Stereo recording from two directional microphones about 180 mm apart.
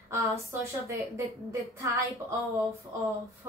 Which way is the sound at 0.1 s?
15° right (ahead or behind).